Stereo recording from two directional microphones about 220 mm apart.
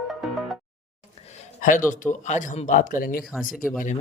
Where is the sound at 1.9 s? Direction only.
35° left (ahead or behind).